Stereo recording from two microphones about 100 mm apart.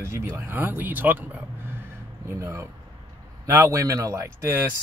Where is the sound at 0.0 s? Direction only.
25° right (ahead or behind).